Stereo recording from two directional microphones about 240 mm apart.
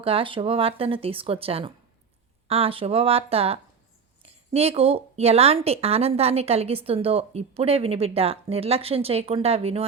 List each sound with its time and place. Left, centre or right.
0.0 s a woman's voice: right